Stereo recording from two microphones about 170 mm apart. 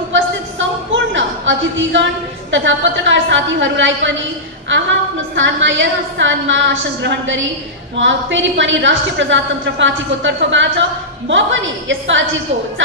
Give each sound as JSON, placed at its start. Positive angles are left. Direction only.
{"t": 0.1, "sound": "a sound", "side_deg": -90}
{"t": 2.5, "sound": "a woman's voice", "side_deg": -90}
{"t": 5.3, "sound": "a woman's voice", "side_deg": -90}